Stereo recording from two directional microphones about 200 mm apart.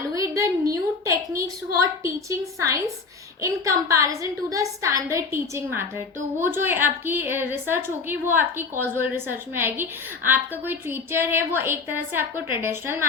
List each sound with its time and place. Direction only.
0.1 s a woman's voice: 15° right (ahead or behind)